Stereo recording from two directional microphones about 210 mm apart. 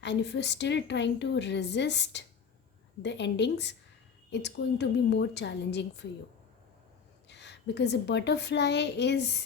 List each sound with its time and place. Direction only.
0.0 s speech: 55° left (ahead or behind)
7.3 s a woman's voice: 55° left (ahead or behind)